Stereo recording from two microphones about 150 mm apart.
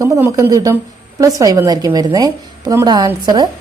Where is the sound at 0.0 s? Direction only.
20° right (ahead or behind).